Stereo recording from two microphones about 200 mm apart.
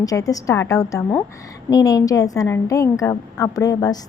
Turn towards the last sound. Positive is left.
turn(degrees=20)  # may be behind; listen again after turning